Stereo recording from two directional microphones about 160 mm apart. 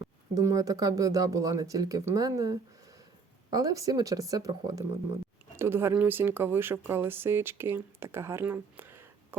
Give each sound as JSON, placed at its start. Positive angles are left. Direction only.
{"t": 0.0, "sound": "speech", "side_deg": -20}